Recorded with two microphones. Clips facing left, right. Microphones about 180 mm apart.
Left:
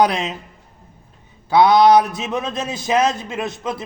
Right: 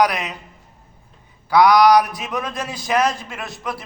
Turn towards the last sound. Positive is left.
turn(degrees=20)  # may be behind; listen again after turning